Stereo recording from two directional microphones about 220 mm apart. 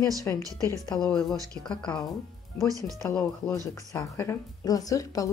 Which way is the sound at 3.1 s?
10° left (ahead or behind).